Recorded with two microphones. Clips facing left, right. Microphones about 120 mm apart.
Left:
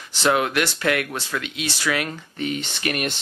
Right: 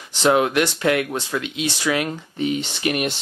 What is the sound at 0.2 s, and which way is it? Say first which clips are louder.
Speech: right 3 dB; 15° right (ahead or behind).